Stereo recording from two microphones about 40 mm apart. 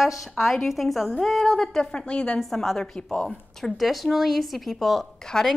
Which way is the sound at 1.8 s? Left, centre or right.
Left.